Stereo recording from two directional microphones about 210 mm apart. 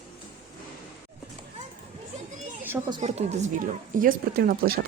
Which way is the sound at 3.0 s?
30° right (ahead or behind).